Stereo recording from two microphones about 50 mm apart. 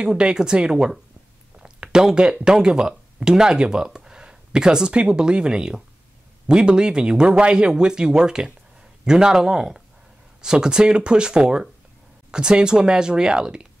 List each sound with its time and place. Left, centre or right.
0.0 s speech: centre
1.6 s a sound: centre
2.3 s speech: centre